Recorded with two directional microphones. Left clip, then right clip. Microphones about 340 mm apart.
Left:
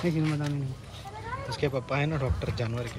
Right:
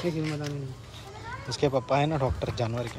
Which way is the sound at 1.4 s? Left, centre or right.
Centre.